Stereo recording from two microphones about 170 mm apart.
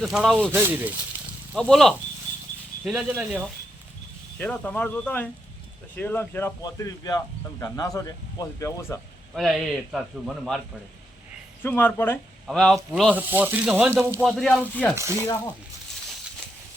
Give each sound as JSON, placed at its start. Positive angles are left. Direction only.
{"t": 0.0, "sound": "speech", "side_deg": 0}
{"t": 0.5, "sound": "speech", "side_deg": -10}
{"t": 1.5, "sound": "speech", "side_deg": 5}
{"t": 4.4, "sound": "speech", "side_deg": 10}
{"t": 9.3, "sound": "speech", "side_deg": 0}
{"t": 11.6, "sound": "speech", "side_deg": 10}
{"t": 13.1, "sound": "speech", "side_deg": -10}
{"t": 14.3, "sound": "speech", "side_deg": 5}
{"t": 14.9, "sound": "speech", "side_deg": -15}